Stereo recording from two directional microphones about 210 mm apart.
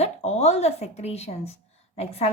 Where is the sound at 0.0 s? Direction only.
30° left (ahead or behind).